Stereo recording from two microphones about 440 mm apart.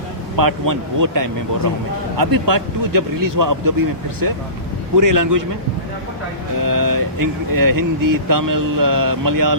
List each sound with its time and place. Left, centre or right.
0.3 s speech: right
4.9 s speech: right
6.6 s speech: right